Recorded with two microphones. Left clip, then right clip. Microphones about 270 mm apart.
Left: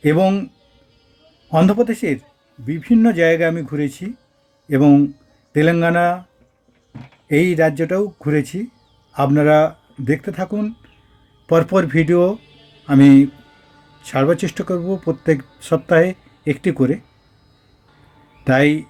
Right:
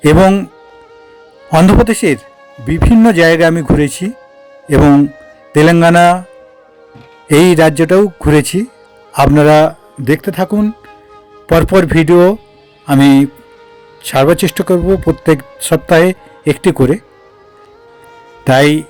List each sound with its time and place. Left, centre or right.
0.0 s speech: right
1.5 s speech: right
7.3 s speech: right
18.4 s speech: right